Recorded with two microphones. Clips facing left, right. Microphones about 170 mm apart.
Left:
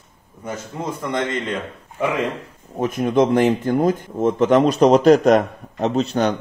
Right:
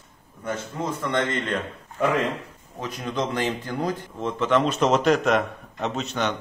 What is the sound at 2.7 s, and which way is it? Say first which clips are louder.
A man's voice: left 11 dB; 50° left (ahead or behind).